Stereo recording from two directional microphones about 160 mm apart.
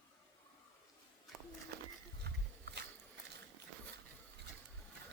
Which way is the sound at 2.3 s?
90° right.